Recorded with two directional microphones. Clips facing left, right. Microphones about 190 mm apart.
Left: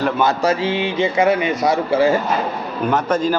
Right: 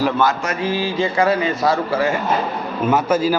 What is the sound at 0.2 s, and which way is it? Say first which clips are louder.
Speech: left 2 dB; 30° left (ahead or behind).